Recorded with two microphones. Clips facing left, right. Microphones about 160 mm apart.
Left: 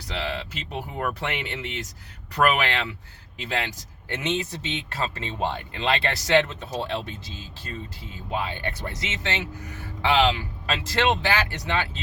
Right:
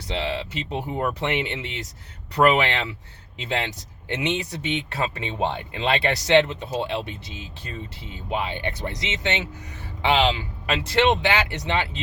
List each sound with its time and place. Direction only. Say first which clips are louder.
0.1 s speech: right 3 dB; 25° right (ahead or behind)
8.3 s speech: right 2 dB; 20° right (ahead or behind)